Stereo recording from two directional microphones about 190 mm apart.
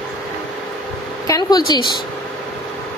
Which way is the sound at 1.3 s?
20° left (ahead or behind).